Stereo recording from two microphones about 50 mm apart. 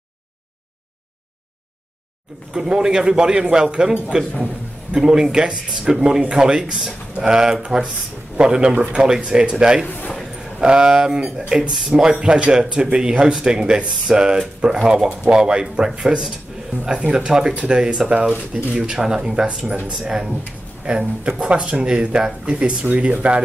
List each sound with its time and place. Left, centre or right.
2.5 s speech: centre
9.0 s speech: centre
9.8 s speech: left
10.6 s speech: centre